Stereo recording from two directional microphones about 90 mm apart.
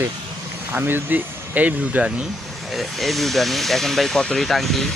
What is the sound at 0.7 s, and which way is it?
Speech, 25° right (ahead or behind).